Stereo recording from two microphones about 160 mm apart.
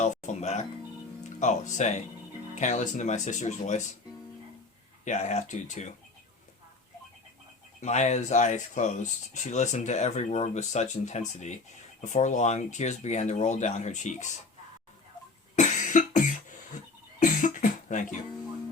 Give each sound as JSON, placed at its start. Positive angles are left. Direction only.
{"t": 0.0, "sound": "music", "side_deg": 45}
{"t": 1.2, "sound": "speech", "side_deg": 50}
{"t": 5.0, "sound": "speech", "side_deg": 45}
{"t": 7.8, "sound": "speech", "side_deg": 45}
{"t": 15.5, "sound": "cough", "side_deg": 50}
{"t": 17.2, "sound": "speech", "side_deg": 55}